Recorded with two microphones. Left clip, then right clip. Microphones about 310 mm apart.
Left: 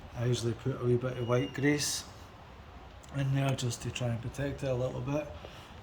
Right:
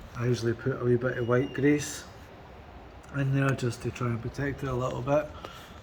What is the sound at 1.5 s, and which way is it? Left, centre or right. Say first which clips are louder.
Speech: right 5 dB; left.